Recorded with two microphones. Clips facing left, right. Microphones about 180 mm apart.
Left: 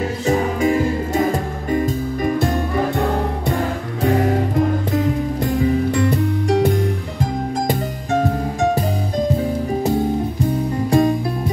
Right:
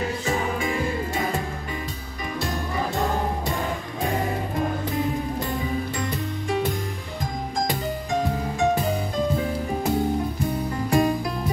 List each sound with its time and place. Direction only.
0.3 s music: 40° left (ahead or behind)
4.1 s music: 70° left (ahead or behind)
5.4 s music: 80° left
8.2 s music: 45° left (ahead or behind)
10.9 s music: 30° left (ahead or behind)